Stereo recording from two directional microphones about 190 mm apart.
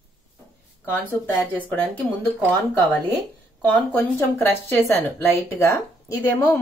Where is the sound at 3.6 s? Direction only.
10° left (ahead or behind).